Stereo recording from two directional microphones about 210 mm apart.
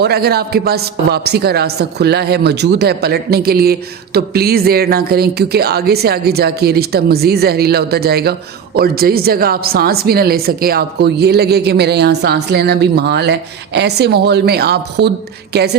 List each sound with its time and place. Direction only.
0.0 s a man's voice: 50° right (ahead or behind)